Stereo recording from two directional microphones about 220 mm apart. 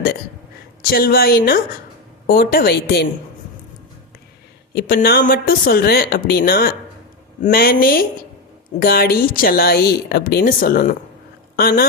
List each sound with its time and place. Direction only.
0.8 s speech: 40° left (ahead or behind)
4.7 s speech: 40° left (ahead or behind)